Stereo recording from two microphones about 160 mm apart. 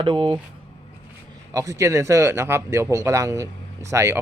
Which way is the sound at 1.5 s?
20° right (ahead or behind).